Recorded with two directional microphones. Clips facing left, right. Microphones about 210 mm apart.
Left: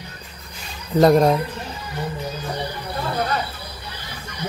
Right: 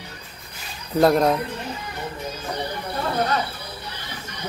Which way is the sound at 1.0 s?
Centre (ahead or behind).